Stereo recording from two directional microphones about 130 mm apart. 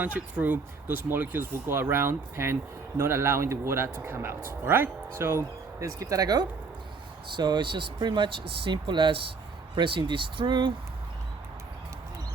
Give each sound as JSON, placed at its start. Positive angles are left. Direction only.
{"t": 0.0, "sound": "a man's voice", "side_deg": -10}